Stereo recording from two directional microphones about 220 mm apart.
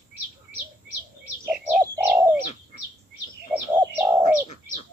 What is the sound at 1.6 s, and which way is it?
Bird, 10° right (ahead or behind).